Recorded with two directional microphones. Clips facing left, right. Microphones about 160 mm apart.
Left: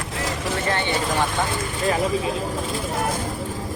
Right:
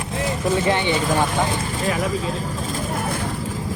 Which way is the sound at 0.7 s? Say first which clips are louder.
Right 3 dB; 15° right (ahead or behind).